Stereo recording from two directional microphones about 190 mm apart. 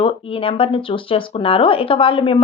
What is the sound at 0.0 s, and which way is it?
Speech, 30° left (ahead or behind).